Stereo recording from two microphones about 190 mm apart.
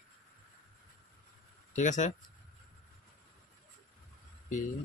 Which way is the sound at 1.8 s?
40° left (ahead or behind).